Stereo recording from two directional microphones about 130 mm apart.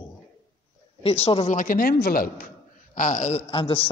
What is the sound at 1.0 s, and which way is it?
Speech, 50° left (ahead or behind).